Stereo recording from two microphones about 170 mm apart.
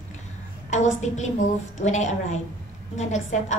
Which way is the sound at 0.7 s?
45° left (ahead or behind).